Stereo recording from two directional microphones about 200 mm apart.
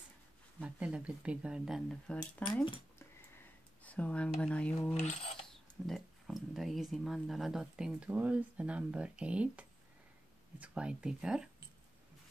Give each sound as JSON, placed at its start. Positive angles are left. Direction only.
{"t": 0.6, "sound": "speech", "side_deg": -5}
{"t": 3.8, "sound": "speech", "side_deg": 5}
{"t": 4.9, "sound": "speech", "side_deg": 35}
{"t": 5.5, "sound": "speech", "side_deg": 0}